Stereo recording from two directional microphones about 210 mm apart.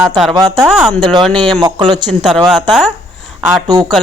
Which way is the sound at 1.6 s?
20° right (ahead or behind).